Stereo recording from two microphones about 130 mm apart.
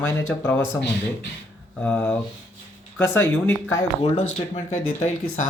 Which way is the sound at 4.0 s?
55° left (ahead or behind).